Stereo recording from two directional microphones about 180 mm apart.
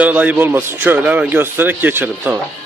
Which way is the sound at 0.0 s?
10° right (ahead or behind).